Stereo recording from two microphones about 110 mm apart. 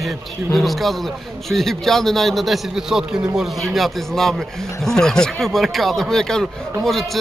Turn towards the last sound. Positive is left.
turn(degrees=0)  # may be behind; listen again after turning